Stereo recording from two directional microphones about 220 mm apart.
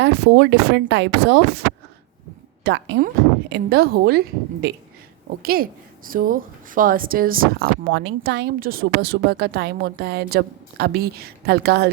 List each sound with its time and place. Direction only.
0.0 s speech: 50° right (ahead or behind)
2.6 s speech: 55° right (ahead or behind)